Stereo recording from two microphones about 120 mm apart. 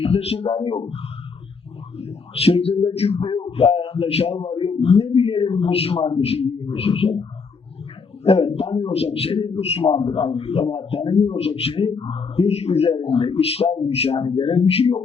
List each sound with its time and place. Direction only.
0.0 s a man's voice: 55° left (ahead or behind)
2.0 s a man's voice: 55° left (ahead or behind)